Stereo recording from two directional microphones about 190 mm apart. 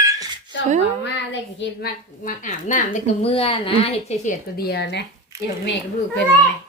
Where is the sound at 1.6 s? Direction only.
65° left (ahead or behind).